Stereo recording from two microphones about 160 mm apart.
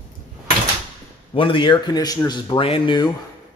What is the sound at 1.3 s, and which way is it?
A man's voice, 30° left (ahead or behind).